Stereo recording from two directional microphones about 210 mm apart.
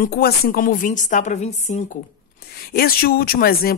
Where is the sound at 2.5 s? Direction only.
45° left (ahead or behind).